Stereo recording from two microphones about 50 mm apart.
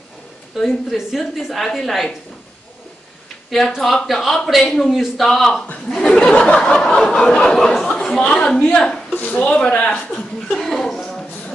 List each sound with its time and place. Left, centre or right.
0.6 s a woman's voice: centre
3.4 s a woman's voice: centre; by 6.7 s left
6.7 s snicker: centre
7.8 s chatter: centre
8.3 s snicker: centre
8.6 s speech: left
10.5 s chuckle: centre